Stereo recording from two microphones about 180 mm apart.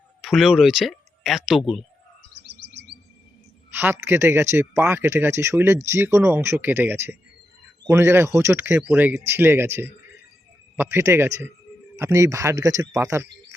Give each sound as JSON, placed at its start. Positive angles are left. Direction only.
{"t": 0.2, "sound": "speech", "side_deg": 0}
{"t": 2.5, "sound": "chirp", "side_deg": -70}
{"t": 3.8, "sound": "speech", "side_deg": -15}